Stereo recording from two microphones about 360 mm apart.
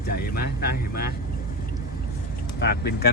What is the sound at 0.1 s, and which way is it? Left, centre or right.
Vehicle, left.